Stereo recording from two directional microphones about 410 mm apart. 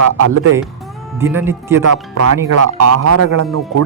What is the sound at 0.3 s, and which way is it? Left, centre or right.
Speech, right.